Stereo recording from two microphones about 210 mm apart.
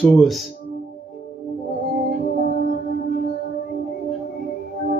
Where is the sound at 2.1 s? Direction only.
40° right (ahead or behind).